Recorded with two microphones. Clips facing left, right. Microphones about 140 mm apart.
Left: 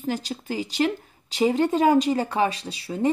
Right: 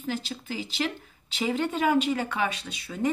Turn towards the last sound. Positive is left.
turn(degrees=35)  # may be behind; listen again after turning